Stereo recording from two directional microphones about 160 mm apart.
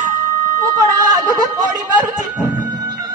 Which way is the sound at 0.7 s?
20° right (ahead or behind).